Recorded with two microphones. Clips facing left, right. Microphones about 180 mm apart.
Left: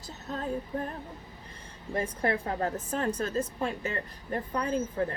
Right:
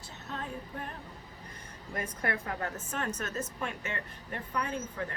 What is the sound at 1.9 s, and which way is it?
A woman's voice, 30° left (ahead or behind).